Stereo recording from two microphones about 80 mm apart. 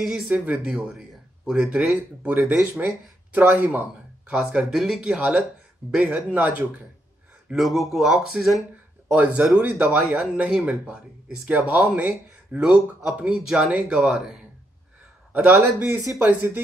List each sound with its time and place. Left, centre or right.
0.3 s speech: centre
0.8 s a sound: centre
1.6 s speech: centre
2.4 s speech: centre
3.3 s speech: right
4.3 s speech: centre
7.5 s speech: centre
9.1 s speech: centre
15.3 s speech: right